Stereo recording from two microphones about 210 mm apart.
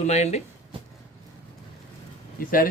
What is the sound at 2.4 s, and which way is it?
Speech, 45° left (ahead or behind).